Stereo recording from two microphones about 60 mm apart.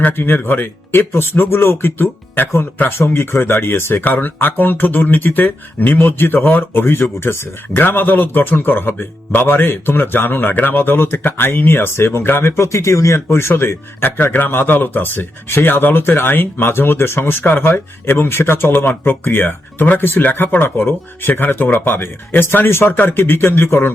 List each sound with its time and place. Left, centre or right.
0.0 s speech: left
4.0 s speech: left
7.8 s speech: left
13.6 s speech: left